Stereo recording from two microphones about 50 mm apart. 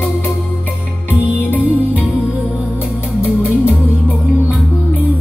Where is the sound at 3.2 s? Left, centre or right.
Left.